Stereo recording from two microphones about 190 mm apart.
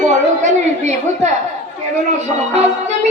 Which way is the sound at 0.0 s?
40° right (ahead or behind).